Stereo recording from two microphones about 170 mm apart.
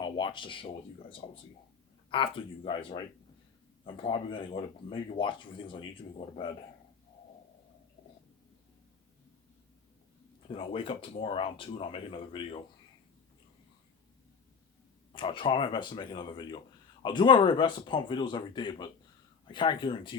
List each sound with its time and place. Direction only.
0.0 s a sound: 30° left (ahead or behind)
2.0 s speech: 30° left (ahead or behind)
10.5 s speech: 30° left (ahead or behind)
15.1 s speech: 30° left (ahead or behind)